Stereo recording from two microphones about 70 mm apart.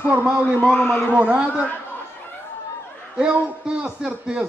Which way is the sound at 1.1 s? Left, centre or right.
Centre.